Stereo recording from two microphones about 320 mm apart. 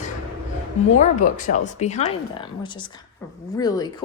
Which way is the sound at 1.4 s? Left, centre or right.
Left.